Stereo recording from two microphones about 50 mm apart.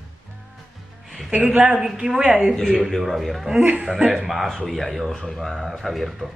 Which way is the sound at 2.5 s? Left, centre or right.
Centre.